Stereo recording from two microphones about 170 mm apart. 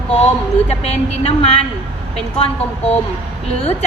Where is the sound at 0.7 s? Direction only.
35° left (ahead or behind).